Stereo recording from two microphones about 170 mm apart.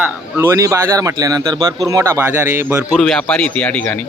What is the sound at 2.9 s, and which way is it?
Speech, 5° left (ahead or behind).